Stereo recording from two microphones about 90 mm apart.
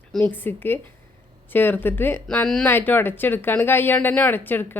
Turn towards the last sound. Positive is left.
turn(degrees=25)  # may be behind; listen again after turning